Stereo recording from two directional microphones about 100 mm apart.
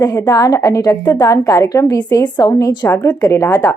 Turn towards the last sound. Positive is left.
turn(degrees=25)  # may be behind; listen again after turning